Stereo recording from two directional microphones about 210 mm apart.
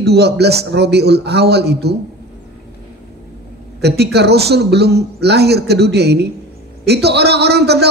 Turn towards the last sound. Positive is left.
turn(degrees=-50)  # may be behind; listen again after turning